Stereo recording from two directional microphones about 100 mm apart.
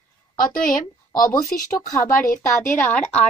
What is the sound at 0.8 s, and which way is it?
Speech, 35° left (ahead or behind).